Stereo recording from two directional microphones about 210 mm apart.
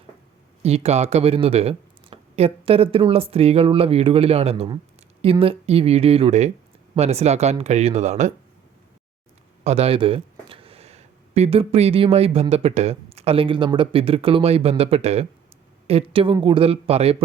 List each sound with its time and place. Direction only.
0.6 s speech: 30° right (ahead or behind)
9.6 s speech: 30° right (ahead or behind)